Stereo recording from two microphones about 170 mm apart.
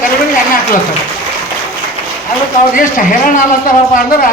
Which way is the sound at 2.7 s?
55° left (ahead or behind).